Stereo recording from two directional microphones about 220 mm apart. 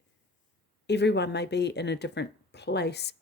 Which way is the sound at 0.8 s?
50° left (ahead or behind).